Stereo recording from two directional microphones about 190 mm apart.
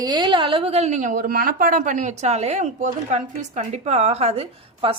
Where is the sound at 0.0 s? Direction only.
25° right (ahead or behind).